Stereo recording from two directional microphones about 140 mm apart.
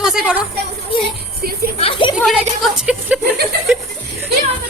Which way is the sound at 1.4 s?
90° right.